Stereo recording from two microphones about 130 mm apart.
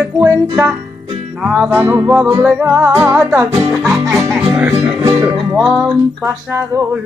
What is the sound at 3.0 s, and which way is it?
Music, 5° right (ahead or behind).